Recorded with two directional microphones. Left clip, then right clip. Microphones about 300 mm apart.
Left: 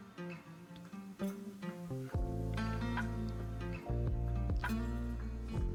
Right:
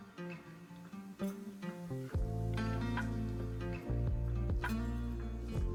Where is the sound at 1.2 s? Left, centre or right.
Centre.